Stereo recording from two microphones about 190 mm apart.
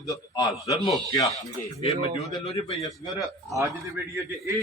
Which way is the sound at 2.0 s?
35° left (ahead or behind).